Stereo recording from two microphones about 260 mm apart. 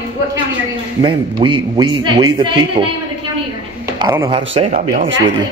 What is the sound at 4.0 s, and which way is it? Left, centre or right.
Speech, centre.